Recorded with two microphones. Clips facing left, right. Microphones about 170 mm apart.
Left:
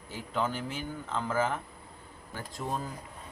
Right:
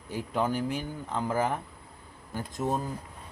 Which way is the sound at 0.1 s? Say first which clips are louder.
Right 4 dB; 15° right (ahead or behind).